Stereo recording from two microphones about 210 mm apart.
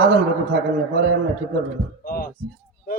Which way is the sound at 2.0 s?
40° left (ahead or behind).